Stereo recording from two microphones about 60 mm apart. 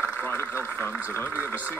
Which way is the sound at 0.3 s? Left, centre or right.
Left.